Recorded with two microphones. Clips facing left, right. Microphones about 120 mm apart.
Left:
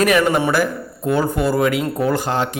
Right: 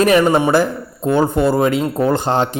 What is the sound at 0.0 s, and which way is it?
Speech, 30° right (ahead or behind).